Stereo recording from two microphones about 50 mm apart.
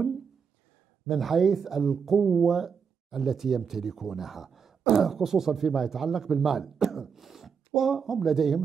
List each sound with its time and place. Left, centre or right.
1.0 s speech: centre